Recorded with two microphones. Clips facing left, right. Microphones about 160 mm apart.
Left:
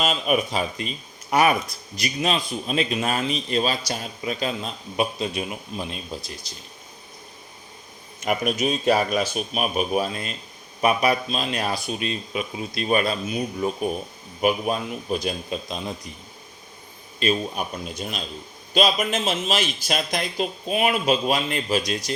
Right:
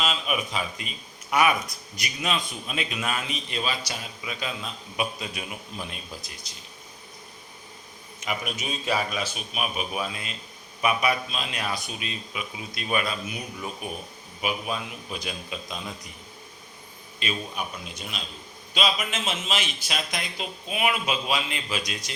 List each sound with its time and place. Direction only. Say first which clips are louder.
0.0 s speech: left 6 dB; 45° left (ahead or behind); by 6.3 s 25° left (ahead or behind)
8.2 s speech: left 8 dB; 45° left (ahead or behind)
8.5 s speech: left 7 dB; 55° left (ahead or behind); by 13.9 s 35° left (ahead or behind)
14.4 s speech: left 7 dB; 45° left (ahead or behind)
17.2 s speech: left 8 dB; 40° left (ahead or behind)